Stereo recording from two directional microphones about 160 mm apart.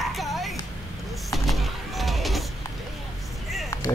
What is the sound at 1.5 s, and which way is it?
Music, centre (ahead or behind).